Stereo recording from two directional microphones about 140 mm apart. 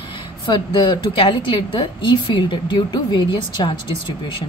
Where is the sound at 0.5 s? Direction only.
35° left (ahead or behind).